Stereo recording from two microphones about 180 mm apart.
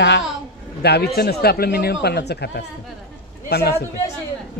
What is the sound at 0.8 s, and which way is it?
Speech, 60° left (ahead or behind).